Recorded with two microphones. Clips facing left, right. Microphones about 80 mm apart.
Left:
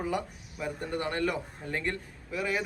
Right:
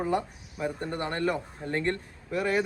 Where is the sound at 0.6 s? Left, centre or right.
Right.